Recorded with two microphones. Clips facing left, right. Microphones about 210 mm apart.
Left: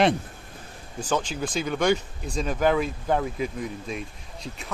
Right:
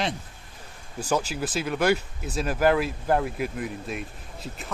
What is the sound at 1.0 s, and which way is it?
Speech, 10° right (ahead or behind).